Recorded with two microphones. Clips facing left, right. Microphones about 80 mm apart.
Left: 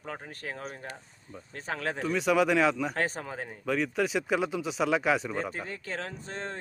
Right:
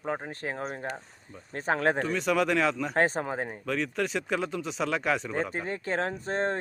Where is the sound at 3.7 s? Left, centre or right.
Centre.